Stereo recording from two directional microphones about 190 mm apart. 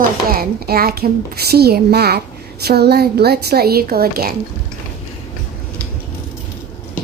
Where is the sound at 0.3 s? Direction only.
55° right (ahead or behind).